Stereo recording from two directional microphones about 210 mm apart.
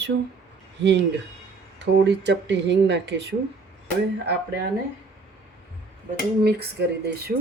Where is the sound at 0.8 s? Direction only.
55° right (ahead or behind).